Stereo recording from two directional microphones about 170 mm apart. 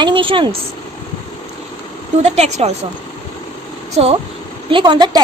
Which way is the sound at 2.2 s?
40° right (ahead or behind).